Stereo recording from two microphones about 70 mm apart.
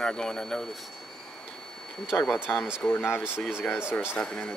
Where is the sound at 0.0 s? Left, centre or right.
Centre.